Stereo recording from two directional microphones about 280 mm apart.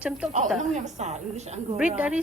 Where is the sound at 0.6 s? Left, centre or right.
Right.